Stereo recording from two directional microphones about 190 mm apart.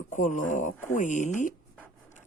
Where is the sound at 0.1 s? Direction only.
40° left (ahead or behind).